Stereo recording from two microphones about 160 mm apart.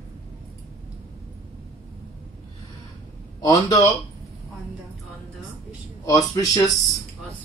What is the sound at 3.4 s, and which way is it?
Speech, 20° left (ahead or behind).